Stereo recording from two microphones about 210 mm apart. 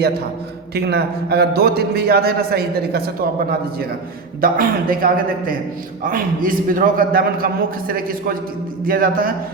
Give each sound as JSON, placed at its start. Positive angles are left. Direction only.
{"t": 0.7, "sound": "a man's voice", "side_deg": -50}
{"t": 4.4, "sound": "a man's voice", "side_deg": -45}